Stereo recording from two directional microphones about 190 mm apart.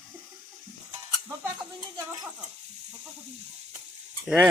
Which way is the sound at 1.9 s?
20° right (ahead or behind).